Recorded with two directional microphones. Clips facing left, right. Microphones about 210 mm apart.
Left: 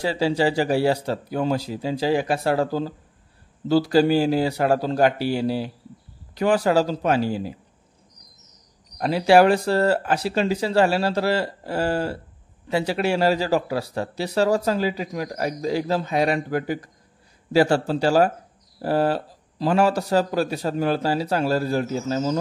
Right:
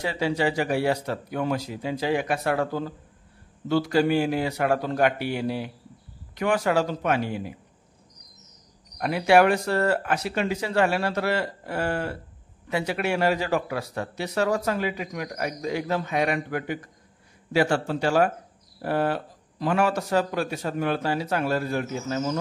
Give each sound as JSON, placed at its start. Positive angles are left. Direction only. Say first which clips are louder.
{"t": 0.0, "sound": "speech", "louder": "left 4 dB", "side_deg": 30}
{"t": 8.9, "sound": "speech", "louder": "left 3 dB", "side_deg": 30}